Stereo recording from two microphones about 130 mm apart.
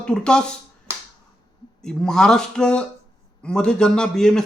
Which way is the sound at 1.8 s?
5° left (ahead or behind).